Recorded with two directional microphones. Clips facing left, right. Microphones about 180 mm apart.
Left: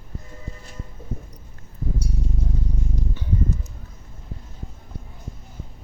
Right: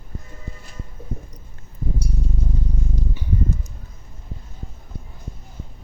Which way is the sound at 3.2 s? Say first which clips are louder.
Right 1 dB; 10° right (ahead or behind).